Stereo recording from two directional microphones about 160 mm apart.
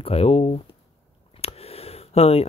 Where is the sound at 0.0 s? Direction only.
40° left (ahead or behind).